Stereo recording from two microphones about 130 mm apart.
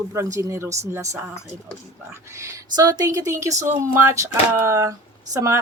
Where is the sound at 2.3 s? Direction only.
20° right (ahead or behind).